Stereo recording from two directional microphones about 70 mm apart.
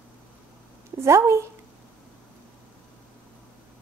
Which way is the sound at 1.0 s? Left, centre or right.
Right.